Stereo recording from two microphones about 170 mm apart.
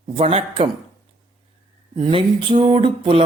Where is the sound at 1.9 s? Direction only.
30° right (ahead or behind).